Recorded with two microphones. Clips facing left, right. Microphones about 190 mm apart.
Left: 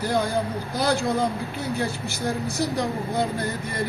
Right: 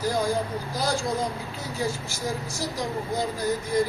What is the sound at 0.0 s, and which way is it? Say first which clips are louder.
Speech: left 1 dB; 60° left (ahead or behind).